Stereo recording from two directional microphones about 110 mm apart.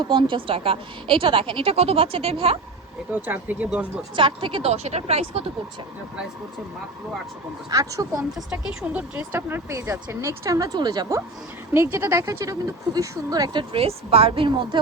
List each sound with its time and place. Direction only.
0.0 s a woman's voice: 45° right (ahead or behind)
3.2 s speech: 15° right (ahead or behind)
4.1 s speech: 50° right (ahead or behind)
4.7 s speech: 80° right
7.7 s speech: 30° right (ahead or behind)
8.4 s speech: 10° right (ahead or behind); by 11.2 s 35° right (ahead or behind)
11.7 s speech: 25° right (ahead or behind); by 14.8 s 50° right (ahead or behind)